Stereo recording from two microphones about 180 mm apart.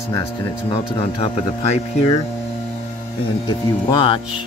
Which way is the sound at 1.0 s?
35° left (ahead or behind).